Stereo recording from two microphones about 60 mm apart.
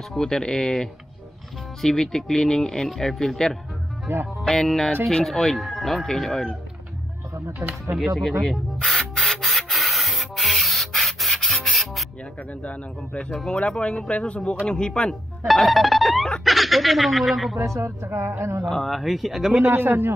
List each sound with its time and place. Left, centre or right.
0.1 s speech: centre
7.3 s speech: right
8.2 s rub: centre
12.6 s speech: centre
15.4 s music: centre
16.4 s speech: centre
17.6 s a woman's voice: right
17.8 s speech: right
18.7 s speech: centre
19.7 s speech: right